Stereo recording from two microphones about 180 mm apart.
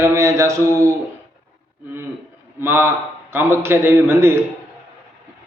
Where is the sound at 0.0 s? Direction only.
15° right (ahead or behind).